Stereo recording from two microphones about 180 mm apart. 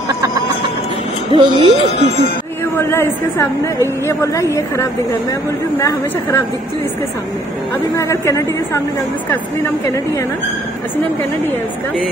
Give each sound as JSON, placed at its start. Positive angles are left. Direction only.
{"t": 1.3, "sound": "music", "side_deg": -25}
{"t": 2.8, "sound": "a woman's voice", "side_deg": 15}
{"t": 7.9, "sound": "a woman's voice", "side_deg": 15}